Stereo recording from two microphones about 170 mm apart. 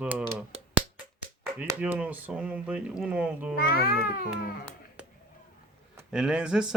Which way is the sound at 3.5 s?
60° left (ahead or behind).